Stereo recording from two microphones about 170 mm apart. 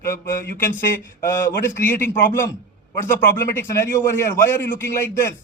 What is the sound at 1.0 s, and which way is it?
Speech, 15° left (ahead or behind).